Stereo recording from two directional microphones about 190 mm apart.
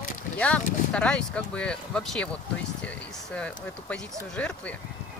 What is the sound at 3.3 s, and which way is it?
Speech, 5° left (ahead or behind).